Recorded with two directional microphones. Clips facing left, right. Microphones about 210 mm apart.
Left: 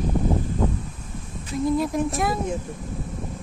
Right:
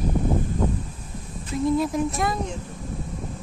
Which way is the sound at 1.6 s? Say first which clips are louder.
Even; centre (ahead or behind).